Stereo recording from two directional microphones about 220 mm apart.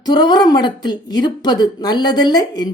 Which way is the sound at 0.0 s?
20° left (ahead or behind).